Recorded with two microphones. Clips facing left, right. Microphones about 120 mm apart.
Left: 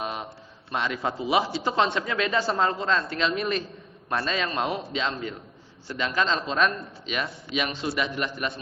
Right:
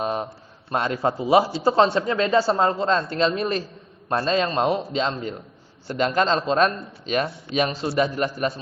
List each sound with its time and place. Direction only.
0.0 s a sound: 40° right (ahead or behind)
0.7 s a man's voice: 40° right (ahead or behind)
5.9 s a man's voice: 50° right (ahead or behind)